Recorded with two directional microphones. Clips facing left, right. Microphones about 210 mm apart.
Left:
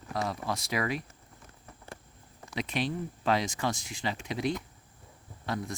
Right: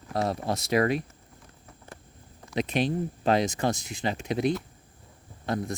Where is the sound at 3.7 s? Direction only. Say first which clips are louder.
Right 5 dB; 20° right (ahead or behind).